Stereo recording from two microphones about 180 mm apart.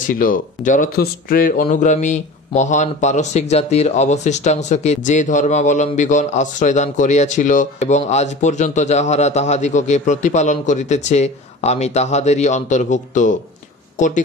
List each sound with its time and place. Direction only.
0.0 s speech: 50° left (ahead or behind)